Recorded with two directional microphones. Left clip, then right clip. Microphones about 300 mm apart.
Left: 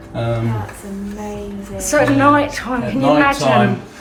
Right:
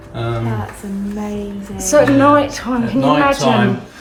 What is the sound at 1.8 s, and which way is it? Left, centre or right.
A woman's voice, centre.